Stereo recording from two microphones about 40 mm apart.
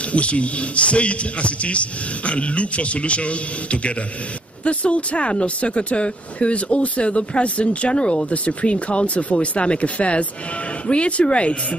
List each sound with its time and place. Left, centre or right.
0.1 s a man's voice: left